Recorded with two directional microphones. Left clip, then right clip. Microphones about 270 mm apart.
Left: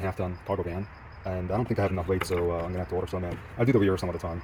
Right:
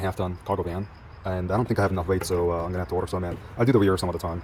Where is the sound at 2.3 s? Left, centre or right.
Right.